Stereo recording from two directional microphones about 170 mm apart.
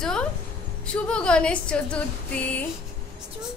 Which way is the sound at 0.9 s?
5° left (ahead or behind).